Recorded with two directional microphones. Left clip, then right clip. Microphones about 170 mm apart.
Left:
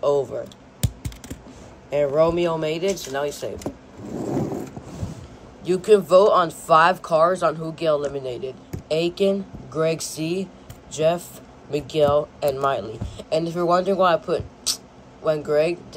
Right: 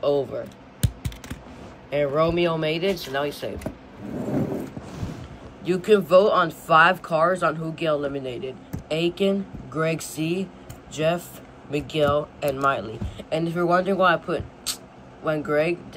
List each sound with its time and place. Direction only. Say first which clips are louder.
0.0 s speech: left 2 dB; 20° left (ahead or behind)
1.9 s speech: left 3 dB; 25° left (ahead or behind)
5.6 s speech: left 3 dB; 20° left (ahead or behind)